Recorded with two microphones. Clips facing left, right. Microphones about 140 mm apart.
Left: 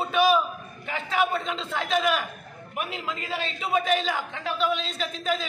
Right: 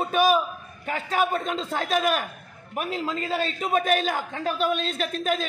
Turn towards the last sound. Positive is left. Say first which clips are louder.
# right 2 dB
turn(degrees=-50)  # may be behind; listen again after turning